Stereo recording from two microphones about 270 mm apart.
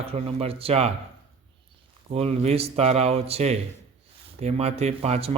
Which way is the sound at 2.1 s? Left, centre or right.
Right.